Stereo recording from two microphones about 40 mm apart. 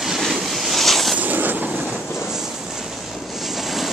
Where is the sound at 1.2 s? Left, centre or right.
Right.